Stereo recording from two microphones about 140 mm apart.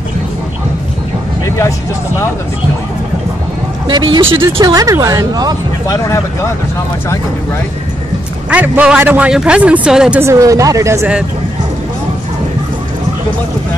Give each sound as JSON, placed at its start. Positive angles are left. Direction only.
{"t": 3.8, "sound": "speech", "side_deg": -35}
{"t": 4.5, "sound": "speech", "side_deg": -25}
{"t": 5.9, "sound": "speech", "side_deg": 20}
{"t": 8.5, "sound": "a man's voice", "side_deg": -10}
{"t": 10.2, "sound": "speech", "side_deg": -25}